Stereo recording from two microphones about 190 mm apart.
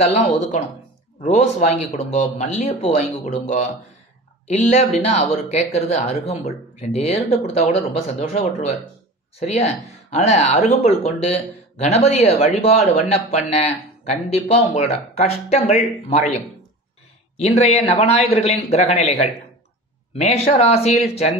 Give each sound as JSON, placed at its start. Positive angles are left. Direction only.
{"t": 0.0, "sound": "speech", "side_deg": 35}
{"t": 10.1, "sound": "speech", "side_deg": 35}